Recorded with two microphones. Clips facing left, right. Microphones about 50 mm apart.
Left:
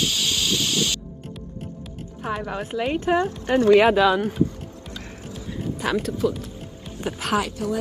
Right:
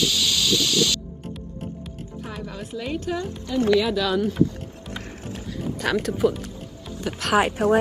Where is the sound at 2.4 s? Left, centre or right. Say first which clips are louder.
Left 4 dB; left.